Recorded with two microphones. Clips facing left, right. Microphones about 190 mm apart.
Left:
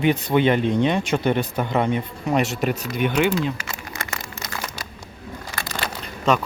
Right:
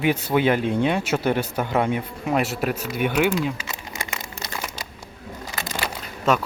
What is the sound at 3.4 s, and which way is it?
Crumpling, 15° right (ahead or behind).